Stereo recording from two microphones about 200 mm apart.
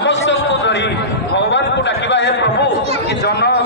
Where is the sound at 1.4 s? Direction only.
65° left (ahead or behind).